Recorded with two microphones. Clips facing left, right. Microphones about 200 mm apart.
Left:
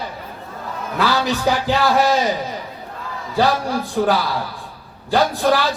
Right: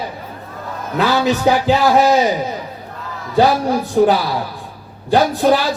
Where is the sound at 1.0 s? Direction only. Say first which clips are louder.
Right 4 dB; 20° right (ahead or behind).